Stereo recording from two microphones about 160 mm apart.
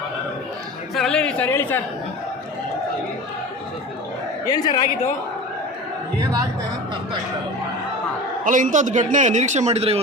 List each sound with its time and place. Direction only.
0.9 s speech: 5° left (ahead or behind)
4.4 s a man's voice: 25° left (ahead or behind)
8.4 s a man's voice: 55° right (ahead or behind)